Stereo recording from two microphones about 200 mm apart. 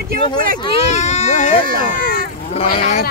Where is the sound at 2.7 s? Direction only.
35° left (ahead or behind).